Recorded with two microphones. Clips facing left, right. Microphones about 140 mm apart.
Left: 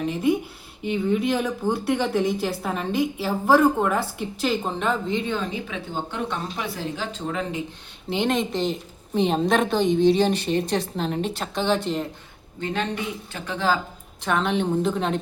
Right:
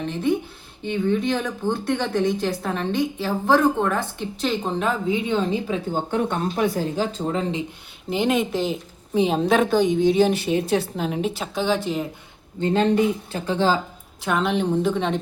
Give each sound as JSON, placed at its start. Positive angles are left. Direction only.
{"t": 0.0, "sound": "a woman's voice", "side_deg": 10}
{"t": 5.4, "sound": "speech", "side_deg": -35}
{"t": 7.3, "sound": "speech", "side_deg": -25}
{"t": 8.1, "sound": "a woman's voice", "side_deg": -5}
{"t": 12.5, "sound": "speech", "side_deg": -30}
{"t": 14.2, "sound": "a woman's voice", "side_deg": -5}